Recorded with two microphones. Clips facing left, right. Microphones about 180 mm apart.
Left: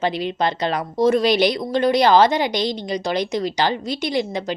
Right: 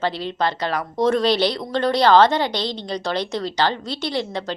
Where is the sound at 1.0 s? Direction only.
10° left (ahead or behind).